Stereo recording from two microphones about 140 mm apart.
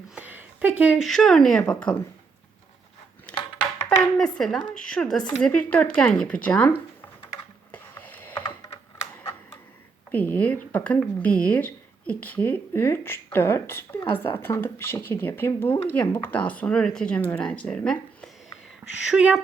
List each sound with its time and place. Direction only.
0.1 s a sound: 10° right (ahead or behind)
1.0 s speech: centre (ahead or behind)
4.2 s speech: 5° left (ahead or behind)
7.7 s a sound: 10° left (ahead or behind)
10.1 s speech: 10° left (ahead or behind)
19.0 s speech: 5° right (ahead or behind)